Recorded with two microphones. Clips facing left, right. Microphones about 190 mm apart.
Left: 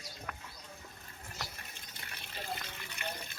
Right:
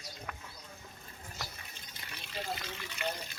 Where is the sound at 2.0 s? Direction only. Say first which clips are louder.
Right 4 dB; 55° left (ahead or behind).